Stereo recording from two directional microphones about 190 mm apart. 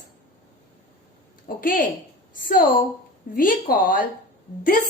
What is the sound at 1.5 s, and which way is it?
A woman's voice, 45° left (ahead or behind).